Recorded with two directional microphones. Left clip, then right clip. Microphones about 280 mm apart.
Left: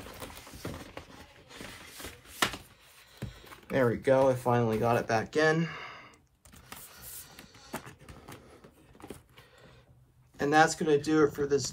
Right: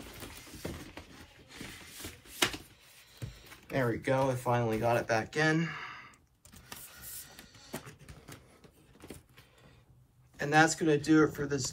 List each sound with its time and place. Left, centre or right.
3.4 s speech: left
7.2 s music: centre
10.3 s speech: centre